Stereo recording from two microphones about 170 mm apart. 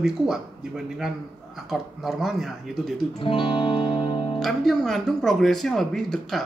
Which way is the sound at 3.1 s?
30° left (ahead or behind).